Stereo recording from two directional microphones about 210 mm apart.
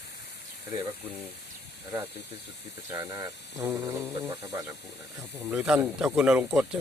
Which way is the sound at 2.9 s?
15° right (ahead or behind).